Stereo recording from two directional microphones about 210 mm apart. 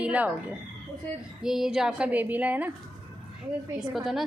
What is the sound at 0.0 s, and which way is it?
A woman's voice, 5° right (ahead or behind).